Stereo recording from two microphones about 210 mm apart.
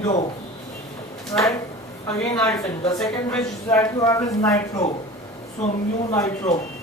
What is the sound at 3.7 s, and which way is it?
Speech, 15° left (ahead or behind).